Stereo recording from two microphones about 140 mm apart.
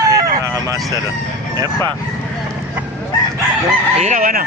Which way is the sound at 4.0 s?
65° right (ahead or behind).